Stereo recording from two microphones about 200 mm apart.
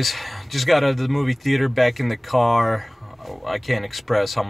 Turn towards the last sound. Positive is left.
turn(degrees=0)  # may be behind; listen again after turning